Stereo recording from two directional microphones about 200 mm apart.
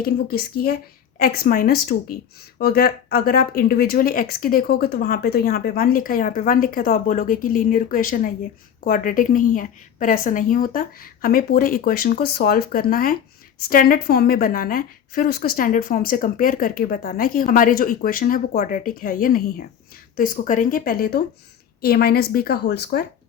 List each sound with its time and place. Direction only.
0.0 s a woman's voice: 50° left (ahead or behind)